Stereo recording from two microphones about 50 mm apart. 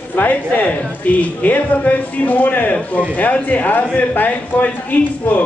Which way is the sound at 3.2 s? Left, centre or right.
Left.